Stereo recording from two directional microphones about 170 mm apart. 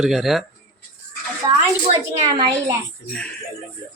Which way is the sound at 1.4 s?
25° right (ahead or behind).